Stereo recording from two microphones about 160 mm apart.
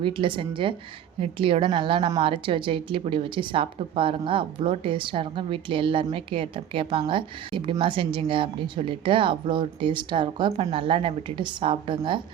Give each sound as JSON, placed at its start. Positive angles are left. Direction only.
{"t": 0.0, "sound": "a woman's voice", "side_deg": -30}